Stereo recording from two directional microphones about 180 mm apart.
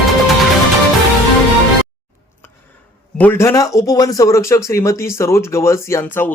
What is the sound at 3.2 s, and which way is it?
Speech, 10° left (ahead or behind).